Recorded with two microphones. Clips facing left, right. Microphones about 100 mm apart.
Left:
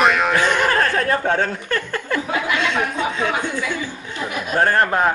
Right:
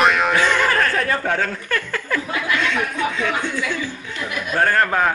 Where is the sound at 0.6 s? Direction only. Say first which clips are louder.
Left 1 dB; 30° left (ahead or behind).